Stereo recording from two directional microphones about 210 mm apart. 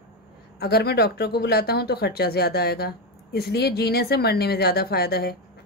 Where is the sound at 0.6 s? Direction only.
50° left (ahead or behind).